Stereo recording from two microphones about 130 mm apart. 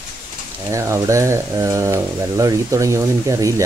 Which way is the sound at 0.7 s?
20° right (ahead or behind).